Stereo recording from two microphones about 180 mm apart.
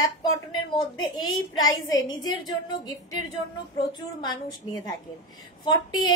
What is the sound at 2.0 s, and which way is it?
A woman's voice, 25° left (ahead or behind).